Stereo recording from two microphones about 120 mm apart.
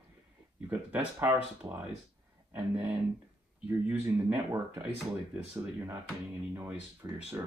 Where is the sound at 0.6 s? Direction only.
15° right (ahead or behind).